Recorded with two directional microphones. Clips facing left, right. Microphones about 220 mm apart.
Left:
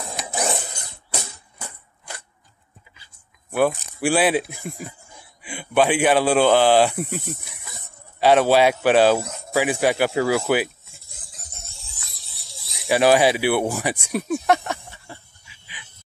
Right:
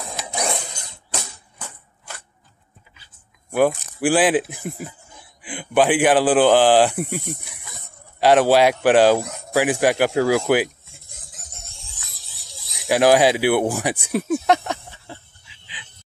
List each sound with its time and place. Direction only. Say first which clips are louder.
0.0 s music: even; centre (ahead or behind)
3.4 s speech: right 2 dB; 10° right (ahead or behind)
11.1 s a sound: even; centre (ahead or behind)
12.8 s speech: right 1 dB; 15° right (ahead or behind)